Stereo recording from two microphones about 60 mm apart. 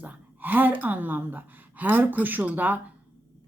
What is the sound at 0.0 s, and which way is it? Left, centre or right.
A woman's voice, right.